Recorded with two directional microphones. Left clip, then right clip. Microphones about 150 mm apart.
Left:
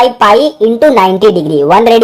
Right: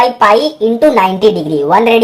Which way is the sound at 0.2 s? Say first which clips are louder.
Left 2 dB; 35° left (ahead or behind).